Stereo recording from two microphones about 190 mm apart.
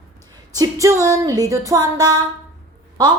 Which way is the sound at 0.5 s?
20° right (ahead or behind).